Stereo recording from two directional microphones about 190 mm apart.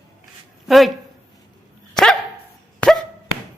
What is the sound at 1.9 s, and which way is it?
Dog, 5° left (ahead or behind).